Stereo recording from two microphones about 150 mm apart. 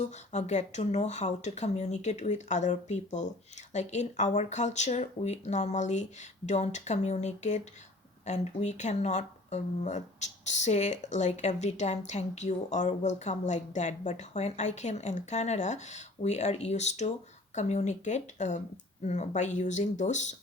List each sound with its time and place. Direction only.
0.0 s speech: 50° left (ahead or behind)